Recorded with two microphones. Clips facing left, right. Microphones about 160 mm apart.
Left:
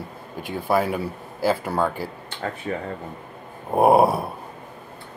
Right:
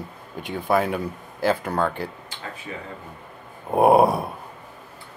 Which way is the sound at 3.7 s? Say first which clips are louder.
Even; centre (ahead or behind).